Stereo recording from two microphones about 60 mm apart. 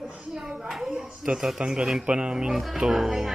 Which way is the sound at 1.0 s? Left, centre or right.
Centre.